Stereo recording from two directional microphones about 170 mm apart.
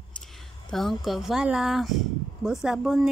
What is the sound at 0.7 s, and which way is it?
Speech, centre (ahead or behind).